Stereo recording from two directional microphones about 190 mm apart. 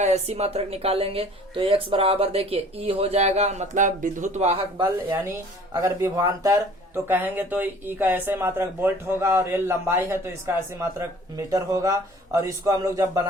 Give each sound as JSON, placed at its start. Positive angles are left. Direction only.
{"t": 0.0, "sound": "a woman's voice", "side_deg": -35}
{"t": 4.8, "sound": "speech", "side_deg": -15}